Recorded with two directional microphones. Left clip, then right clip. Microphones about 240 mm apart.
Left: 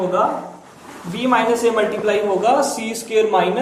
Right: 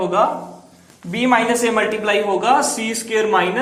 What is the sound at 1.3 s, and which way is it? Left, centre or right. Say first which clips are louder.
A man's voice: left 1 dB; right.